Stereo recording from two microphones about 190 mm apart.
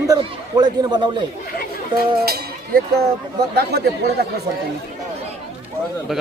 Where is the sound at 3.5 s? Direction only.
55° right (ahead or behind).